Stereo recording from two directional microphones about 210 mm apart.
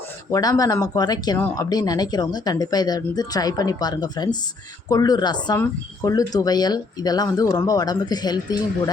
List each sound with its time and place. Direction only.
0.3 s speech: 15° left (ahead or behind)